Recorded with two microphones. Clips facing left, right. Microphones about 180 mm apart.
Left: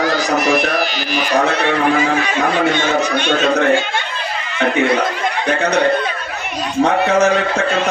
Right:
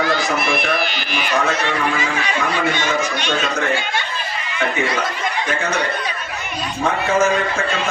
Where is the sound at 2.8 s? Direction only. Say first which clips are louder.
Left 4 dB; 55° left (ahead or behind).